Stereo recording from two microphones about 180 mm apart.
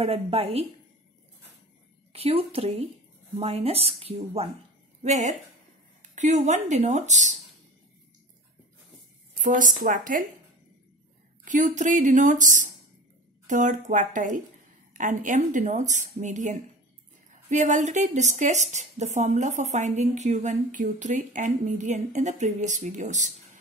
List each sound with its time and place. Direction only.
0.0 s speech: 35° right (ahead or behind)
2.1 s speech: 35° right (ahead or behind)
9.4 s a woman's voice: 45° right (ahead or behind)
11.4 s a woman's voice: 45° right (ahead or behind)